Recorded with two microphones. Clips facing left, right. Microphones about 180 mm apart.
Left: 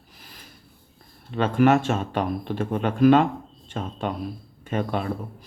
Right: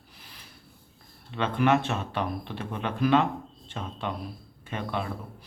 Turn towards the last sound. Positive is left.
turn(degrees=45)  # may be behind; listen again after turning